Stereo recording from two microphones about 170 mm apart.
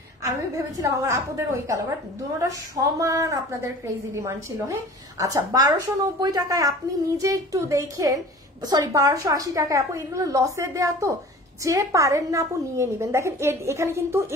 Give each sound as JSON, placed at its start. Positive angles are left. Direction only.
{"t": 0.7, "sound": "a woman's voice", "side_deg": -20}